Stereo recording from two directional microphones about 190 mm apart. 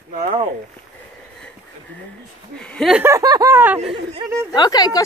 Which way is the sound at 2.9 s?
15° right (ahead or behind).